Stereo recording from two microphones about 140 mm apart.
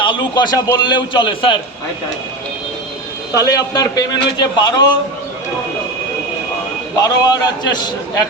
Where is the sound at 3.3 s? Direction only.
25° left (ahead or behind).